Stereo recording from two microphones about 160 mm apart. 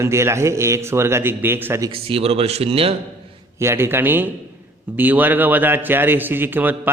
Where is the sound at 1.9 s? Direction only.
35° right (ahead or behind).